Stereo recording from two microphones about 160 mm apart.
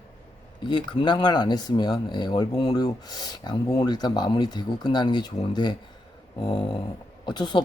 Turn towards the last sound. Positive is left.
turn(degrees=30)  # may be behind; listen again after turning